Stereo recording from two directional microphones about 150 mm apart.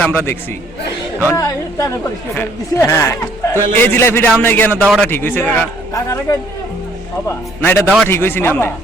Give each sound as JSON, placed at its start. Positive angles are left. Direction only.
{"t": 0.0, "sound": "a woman's voice", "side_deg": 15}
{"t": 5.9, "sound": "a woman's voice", "side_deg": 20}